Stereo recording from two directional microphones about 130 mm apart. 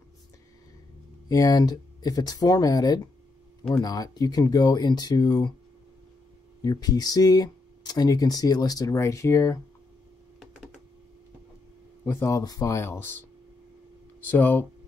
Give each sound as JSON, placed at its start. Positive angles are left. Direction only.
{"t": 1.3, "sound": "speech", "side_deg": 30}
{"t": 6.6, "sound": "speech", "side_deg": 30}
{"t": 12.0, "sound": "speech", "side_deg": 20}
{"t": 14.2, "sound": "speech", "side_deg": 15}